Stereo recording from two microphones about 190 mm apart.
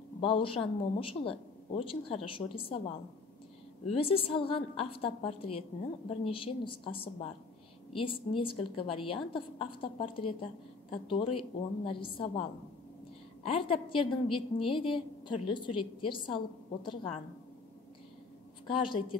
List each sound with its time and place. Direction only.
0.2 s a woman's voice: 30° left (ahead or behind)
3.8 s a woman's voice: 30° left (ahead or behind)
18.7 s a woman's voice: 25° left (ahead or behind)